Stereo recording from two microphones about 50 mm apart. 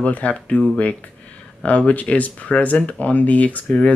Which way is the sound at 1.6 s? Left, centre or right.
Left.